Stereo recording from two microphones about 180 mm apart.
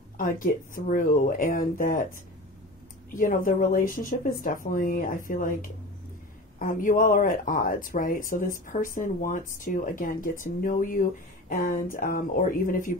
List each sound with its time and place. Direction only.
0.2 s speech: 50° left (ahead or behind)
3.2 s speech: 50° left (ahead or behind)